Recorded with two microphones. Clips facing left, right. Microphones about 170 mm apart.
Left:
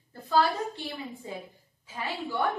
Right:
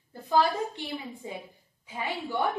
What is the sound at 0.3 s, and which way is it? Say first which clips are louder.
A woman's voice: right 1 dB; 15° right (ahead or behind).